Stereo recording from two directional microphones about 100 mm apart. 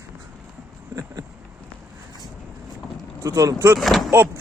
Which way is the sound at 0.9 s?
35° right (ahead or behind).